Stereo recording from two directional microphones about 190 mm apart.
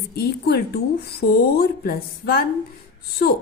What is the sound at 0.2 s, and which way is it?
A woman's voice, 55° left (ahead or behind).